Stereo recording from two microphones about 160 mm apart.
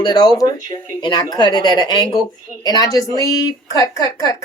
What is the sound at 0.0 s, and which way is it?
Speech, 25° left (ahead or behind).